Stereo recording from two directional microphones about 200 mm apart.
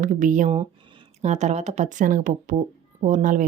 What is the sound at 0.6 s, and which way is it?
Speech, 25° right (ahead or behind).